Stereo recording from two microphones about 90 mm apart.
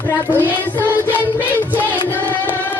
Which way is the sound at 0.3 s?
20° left (ahead or behind).